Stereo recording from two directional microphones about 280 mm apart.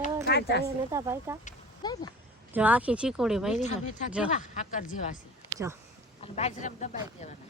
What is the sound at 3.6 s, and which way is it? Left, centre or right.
Speech, left.